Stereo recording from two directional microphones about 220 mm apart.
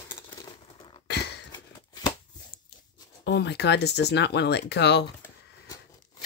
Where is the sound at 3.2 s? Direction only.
50° left (ahead or behind).